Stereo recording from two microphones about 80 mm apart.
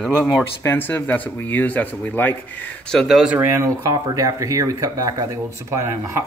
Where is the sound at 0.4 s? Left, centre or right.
Left.